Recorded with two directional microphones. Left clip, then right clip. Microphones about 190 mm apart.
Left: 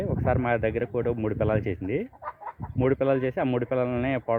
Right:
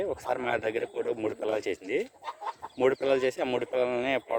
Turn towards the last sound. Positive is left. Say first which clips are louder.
# even
turn(degrees=-10)  # may be behind; listen again after turning